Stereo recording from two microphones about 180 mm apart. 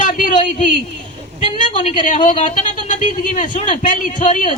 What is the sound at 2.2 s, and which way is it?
Speech, 45° left (ahead or behind).